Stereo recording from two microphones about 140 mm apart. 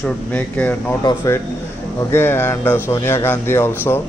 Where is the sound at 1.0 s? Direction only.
25° left (ahead or behind).